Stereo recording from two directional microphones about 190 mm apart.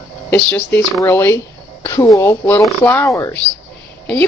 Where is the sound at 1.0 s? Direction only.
10° left (ahead or behind).